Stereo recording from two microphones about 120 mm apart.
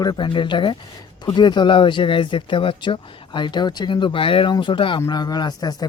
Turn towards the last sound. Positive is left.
turn(degrees=35)  # may be behind; listen again after turning